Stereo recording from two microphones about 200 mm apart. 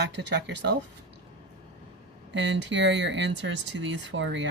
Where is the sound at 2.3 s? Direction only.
65° right (ahead or behind).